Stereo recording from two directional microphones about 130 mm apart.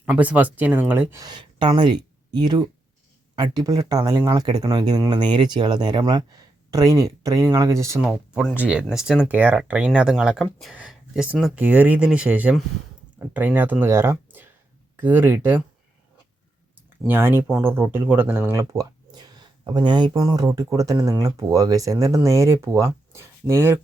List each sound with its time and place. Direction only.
0.0 s speech: 10° right (ahead or behind)
1.2 s speech: 35° right (ahead or behind)
8.0 s speech: 5° right (ahead or behind)
17.1 s speech: 15° right (ahead or behind)